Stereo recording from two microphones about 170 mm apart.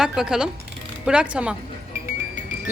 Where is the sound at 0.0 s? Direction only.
5° right (ahead or behind).